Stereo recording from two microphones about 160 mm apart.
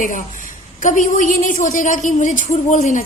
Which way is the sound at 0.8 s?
50° left (ahead or behind).